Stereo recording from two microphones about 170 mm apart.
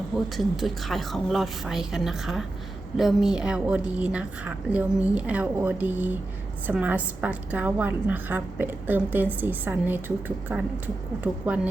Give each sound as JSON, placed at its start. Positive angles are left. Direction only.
{"t": 0.3, "sound": "a woman's voice", "side_deg": 0}